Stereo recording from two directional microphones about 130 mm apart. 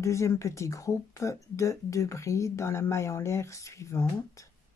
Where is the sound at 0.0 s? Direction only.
20° left (ahead or behind).